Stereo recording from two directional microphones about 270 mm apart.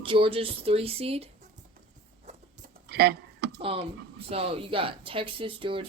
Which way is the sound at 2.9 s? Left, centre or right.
Right.